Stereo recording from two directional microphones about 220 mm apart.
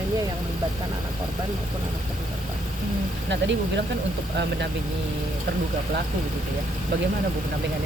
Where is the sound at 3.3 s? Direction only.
55° right (ahead or behind).